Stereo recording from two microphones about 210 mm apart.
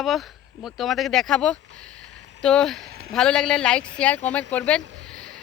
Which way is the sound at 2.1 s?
60° right (ahead or behind).